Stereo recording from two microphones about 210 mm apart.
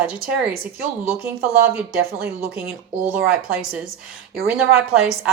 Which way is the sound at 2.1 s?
45° right (ahead or behind).